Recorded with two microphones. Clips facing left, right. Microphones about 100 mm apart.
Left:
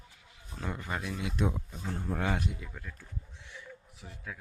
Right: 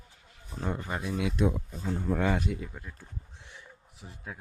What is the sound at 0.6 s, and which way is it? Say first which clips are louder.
Speech: right 3 dB; 25° right (ahead or behind).